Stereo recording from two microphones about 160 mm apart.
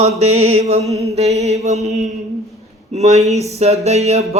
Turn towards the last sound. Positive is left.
turn(degrees=-45)  # may be behind; listen again after turning